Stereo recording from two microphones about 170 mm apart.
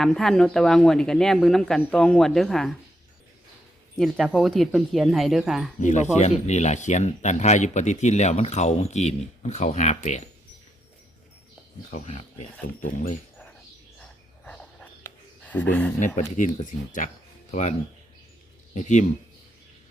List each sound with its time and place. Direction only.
0.0 s speech: 5° left (ahead or behind)
3.9 s speech: centre (ahead or behind)
5.8 s speech: 45° left (ahead or behind)
11.9 s speech: 45° left (ahead or behind)
14.4 s a sound: 5° left (ahead or behind)
16.0 s speech: 50° left (ahead or behind)